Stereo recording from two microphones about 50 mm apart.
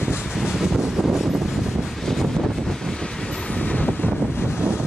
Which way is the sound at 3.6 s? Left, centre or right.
Left.